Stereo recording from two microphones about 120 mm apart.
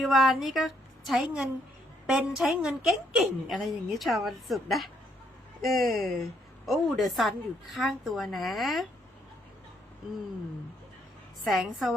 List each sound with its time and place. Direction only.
0.0 s a woman's voice: centre (ahead or behind)
11.4 s a woman's voice: centre (ahead or behind)